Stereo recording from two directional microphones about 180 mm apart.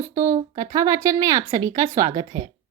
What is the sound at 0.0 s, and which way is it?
Speech, 15° right (ahead or behind).